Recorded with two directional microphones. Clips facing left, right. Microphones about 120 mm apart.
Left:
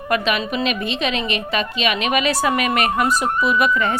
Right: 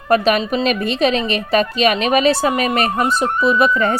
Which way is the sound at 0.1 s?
40° right (ahead or behind).